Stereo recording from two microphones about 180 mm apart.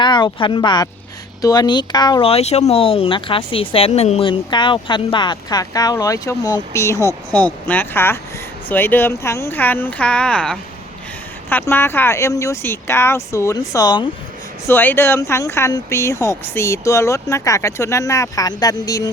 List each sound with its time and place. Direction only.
0.0 s speech: 25° left (ahead or behind)
14.7 s speech: 10° left (ahead or behind)